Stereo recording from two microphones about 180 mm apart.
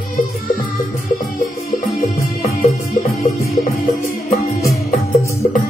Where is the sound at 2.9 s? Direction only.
50° left (ahead or behind).